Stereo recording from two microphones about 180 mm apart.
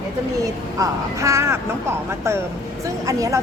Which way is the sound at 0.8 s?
15° right (ahead or behind).